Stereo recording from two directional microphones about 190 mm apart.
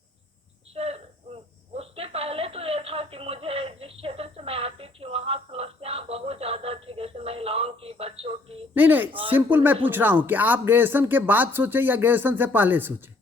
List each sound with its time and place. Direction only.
0.7 s cricket: 30° right (ahead or behind)
8.7 s speech: 10° right (ahead or behind)